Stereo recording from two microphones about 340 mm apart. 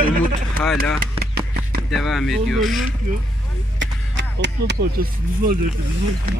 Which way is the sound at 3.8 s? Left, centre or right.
Right.